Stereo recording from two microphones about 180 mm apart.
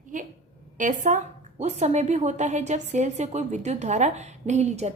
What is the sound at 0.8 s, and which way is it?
A woman's voice, 45° right (ahead or behind).